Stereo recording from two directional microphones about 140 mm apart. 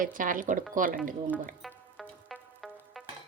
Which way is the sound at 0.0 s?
75° right (ahead or behind).